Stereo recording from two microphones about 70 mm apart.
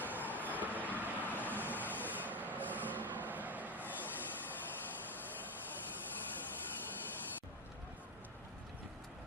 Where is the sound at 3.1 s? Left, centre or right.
Right.